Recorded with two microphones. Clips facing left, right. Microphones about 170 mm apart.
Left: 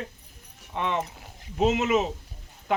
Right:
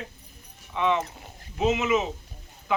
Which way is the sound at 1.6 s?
45° left (ahead or behind).